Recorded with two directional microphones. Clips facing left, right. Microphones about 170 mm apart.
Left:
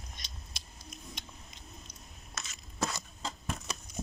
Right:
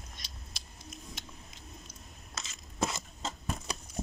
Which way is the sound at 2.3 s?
25° right (ahead or behind).